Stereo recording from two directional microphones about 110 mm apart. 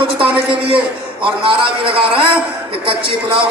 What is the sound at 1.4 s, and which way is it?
Speech, 55° right (ahead or behind).